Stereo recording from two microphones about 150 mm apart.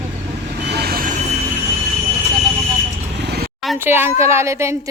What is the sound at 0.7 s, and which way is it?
Vehicle, 90° right.